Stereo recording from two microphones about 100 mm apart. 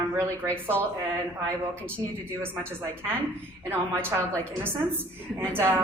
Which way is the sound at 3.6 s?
25° right (ahead or behind).